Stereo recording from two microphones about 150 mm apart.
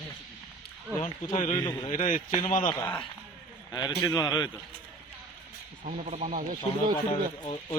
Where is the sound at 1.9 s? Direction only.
60° left (ahead or behind).